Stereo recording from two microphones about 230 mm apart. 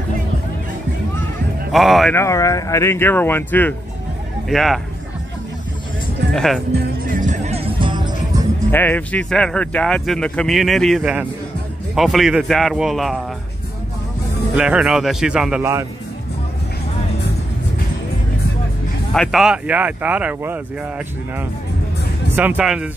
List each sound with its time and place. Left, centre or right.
1.7 s speech: centre
2.1 s speech: centre
6.3 s speech: centre
6.7 s music: right; by 8.5 s centre
8.7 s speech: centre
14.5 s speech: centre
19.1 s speech: centre
22.3 s speech: centre